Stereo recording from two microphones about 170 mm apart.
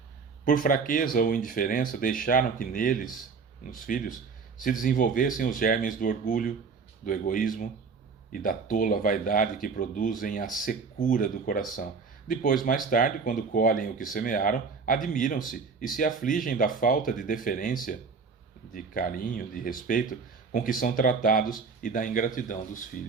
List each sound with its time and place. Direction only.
0.4 s speech: 55° left (ahead or behind)
8.7 s speech: 55° left (ahead or behind)